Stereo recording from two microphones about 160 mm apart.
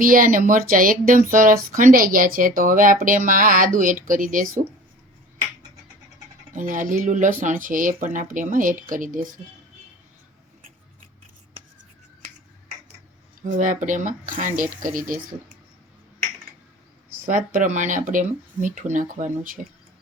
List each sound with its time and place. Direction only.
0.0 s speech: 60° right (ahead or behind)
6.5 s speech: 55° right (ahead or behind)
13.4 s speech: 55° right (ahead or behind)
17.2 s speech: 55° right (ahead or behind)